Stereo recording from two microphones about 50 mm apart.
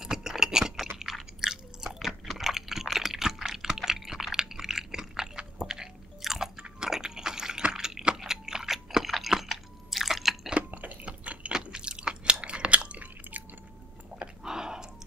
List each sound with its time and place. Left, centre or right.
0.0 s chewing: centre
2.2 s typing: centre
6.6 s a sound: centre
10.5 s drip: right
11.1 s a sound: right
11.5 s chewing: centre
14.1 s chewing: centre